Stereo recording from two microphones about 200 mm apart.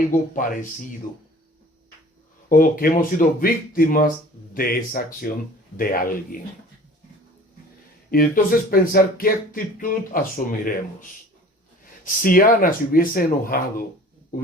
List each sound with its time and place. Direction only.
0.3 s speech: 40° left (ahead or behind)
2.5 s speech: 45° left (ahead or behind)
8.1 s speech: 45° left (ahead or behind)